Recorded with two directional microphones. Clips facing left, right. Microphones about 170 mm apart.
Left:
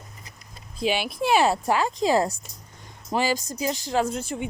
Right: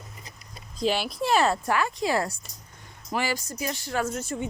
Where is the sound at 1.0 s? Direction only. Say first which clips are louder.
Left 2 dB; 60° left (ahead or behind).